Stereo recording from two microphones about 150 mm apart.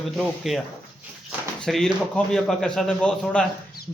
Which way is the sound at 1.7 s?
Centre (ahead or behind).